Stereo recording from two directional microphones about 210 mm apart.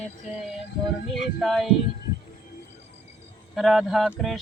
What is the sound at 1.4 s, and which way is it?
Speech, centre (ahead or behind).